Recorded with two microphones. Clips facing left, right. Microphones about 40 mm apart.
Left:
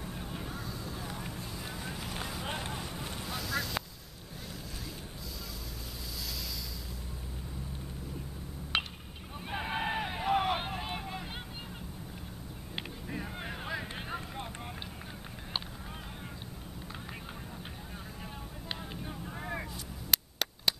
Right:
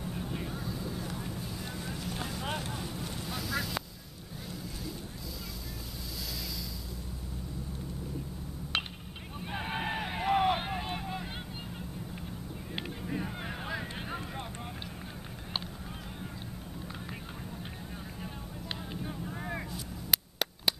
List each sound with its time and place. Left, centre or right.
0.0 s vehicle: centre
0.9 s vehicle: centre
2.6 s boat: centre
3.3 s vehicle: centre
8.7 s a sound: centre
9.5 s hubbub: centre
12.7 s a sound: centre
18.2 s vehicle: centre